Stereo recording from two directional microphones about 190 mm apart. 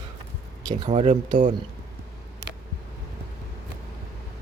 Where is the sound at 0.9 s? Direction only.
40° right (ahead or behind).